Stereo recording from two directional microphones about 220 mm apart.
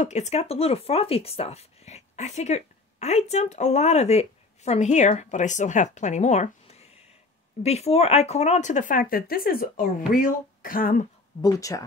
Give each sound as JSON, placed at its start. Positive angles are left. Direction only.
{"t": 0.0, "sound": "speech", "side_deg": 30}
{"t": 11.4, "sound": "speech", "side_deg": 15}